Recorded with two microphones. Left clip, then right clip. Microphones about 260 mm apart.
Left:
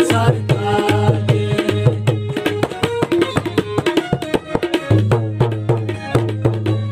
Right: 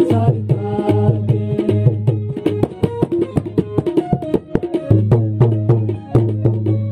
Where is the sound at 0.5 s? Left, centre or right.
Left.